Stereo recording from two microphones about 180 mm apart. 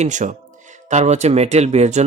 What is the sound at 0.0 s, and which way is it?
Speech, 45° right (ahead or behind).